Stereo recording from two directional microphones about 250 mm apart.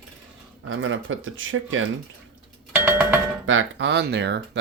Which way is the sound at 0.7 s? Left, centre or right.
Right.